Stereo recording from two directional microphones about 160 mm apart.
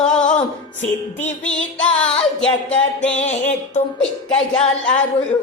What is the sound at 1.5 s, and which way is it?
Music, 5° left (ahead or behind).